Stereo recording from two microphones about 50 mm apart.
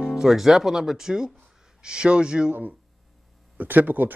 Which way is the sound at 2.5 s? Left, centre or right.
Right.